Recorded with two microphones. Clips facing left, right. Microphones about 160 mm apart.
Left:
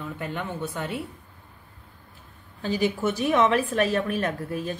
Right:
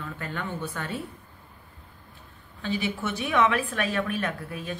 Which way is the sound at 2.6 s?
45° left (ahead or behind).